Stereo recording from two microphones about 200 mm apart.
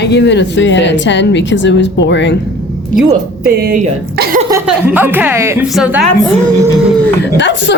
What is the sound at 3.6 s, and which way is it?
Speech, 50° right (ahead or behind).